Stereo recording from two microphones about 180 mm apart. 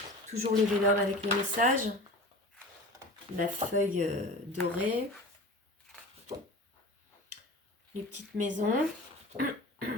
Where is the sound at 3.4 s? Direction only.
45° right (ahead or behind).